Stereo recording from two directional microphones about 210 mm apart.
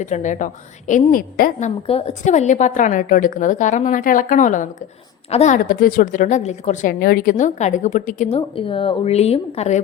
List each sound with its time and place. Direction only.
0.0 s a woman's voice: 35° left (ahead or behind)